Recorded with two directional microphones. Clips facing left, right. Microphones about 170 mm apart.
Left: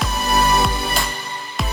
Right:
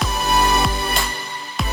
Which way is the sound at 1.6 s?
Centre (ahead or behind).